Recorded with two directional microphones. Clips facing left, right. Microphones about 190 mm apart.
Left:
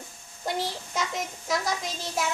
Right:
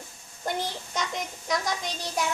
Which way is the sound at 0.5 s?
Centre (ahead or behind).